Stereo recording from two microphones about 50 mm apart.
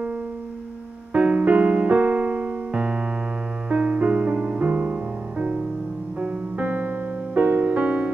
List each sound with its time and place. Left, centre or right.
1.1 s music: right
1.8 s keyboard: right
3.6 s music: right